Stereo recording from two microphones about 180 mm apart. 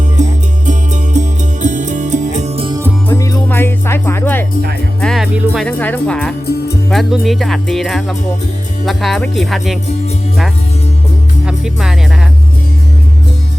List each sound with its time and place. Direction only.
0.2 s music: 40° right (ahead or behind)
2.6 s music: 20° right (ahead or behind)
3.1 s music: 20° left (ahead or behind)
4.9 s music: centre (ahead or behind)
5.6 s speech: 10° left (ahead or behind)
11.4 s music: 5° right (ahead or behind)